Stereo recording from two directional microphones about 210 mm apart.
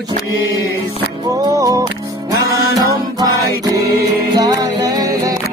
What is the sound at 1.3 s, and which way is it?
Music, 15° right (ahead or behind).